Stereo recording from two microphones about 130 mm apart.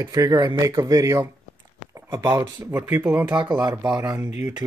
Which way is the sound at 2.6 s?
15° right (ahead or behind).